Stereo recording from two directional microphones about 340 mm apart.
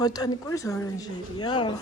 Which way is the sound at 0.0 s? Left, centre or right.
Centre.